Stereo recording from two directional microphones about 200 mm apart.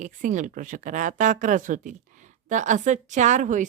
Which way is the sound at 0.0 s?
40° right (ahead or behind).